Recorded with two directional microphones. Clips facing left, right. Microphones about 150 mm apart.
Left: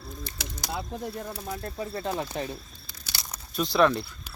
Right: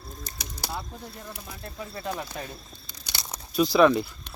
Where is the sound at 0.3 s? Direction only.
40° right (ahead or behind).